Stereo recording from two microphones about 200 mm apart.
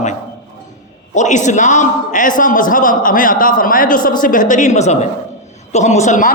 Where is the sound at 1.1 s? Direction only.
35° left (ahead or behind).